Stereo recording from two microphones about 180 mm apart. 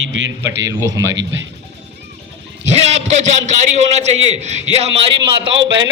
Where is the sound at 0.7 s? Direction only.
15° right (ahead or behind).